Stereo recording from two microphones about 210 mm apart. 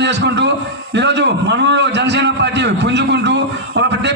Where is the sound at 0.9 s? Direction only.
55° right (ahead or behind).